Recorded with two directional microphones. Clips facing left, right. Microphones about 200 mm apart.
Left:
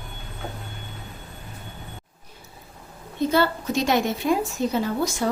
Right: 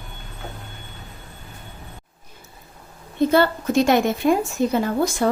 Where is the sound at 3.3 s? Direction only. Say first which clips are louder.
Right 4 dB; 50° right (ahead or behind).